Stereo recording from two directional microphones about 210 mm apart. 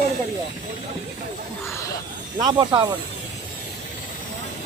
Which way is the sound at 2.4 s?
20° right (ahead or behind).